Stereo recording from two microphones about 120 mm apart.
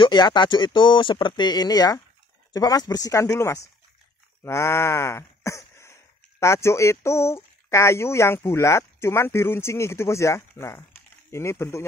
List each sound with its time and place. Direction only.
0.0 s speech: 40° left (ahead or behind); by 11.8 s 20° left (ahead or behind)